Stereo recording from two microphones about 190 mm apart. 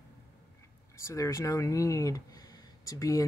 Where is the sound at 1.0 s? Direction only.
15° left (ahead or behind).